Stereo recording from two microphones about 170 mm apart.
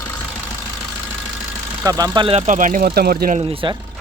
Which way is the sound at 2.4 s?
50° right (ahead or behind).